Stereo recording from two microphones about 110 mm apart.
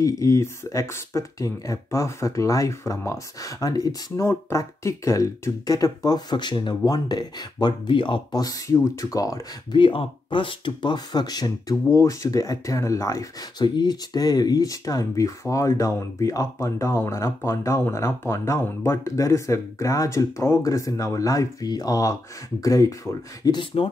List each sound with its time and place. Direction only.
0.0 s speech: 30° left (ahead or behind)
9.8 s speech: 50° left (ahead or behind); by 22.9 s 30° left (ahead or behind)
23.4 s speech: 40° left (ahead or behind)